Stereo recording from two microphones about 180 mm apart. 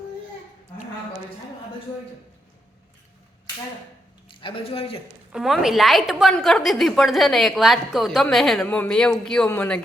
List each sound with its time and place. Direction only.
4.3 s a woman's voice: 30° left (ahead or behind)
5.3 s a woman's voice: centre (ahead or behind)